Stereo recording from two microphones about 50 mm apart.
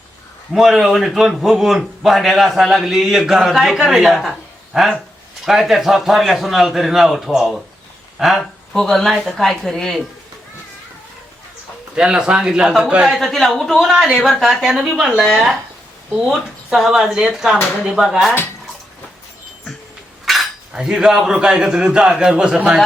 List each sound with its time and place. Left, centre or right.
0.5 s a man's voice: centre
8.7 s speech: centre
11.9 s a man's voice: centre
13.1 s a man's voice: centre
20.3 s cutlery: centre
20.7 s a man's voice: centre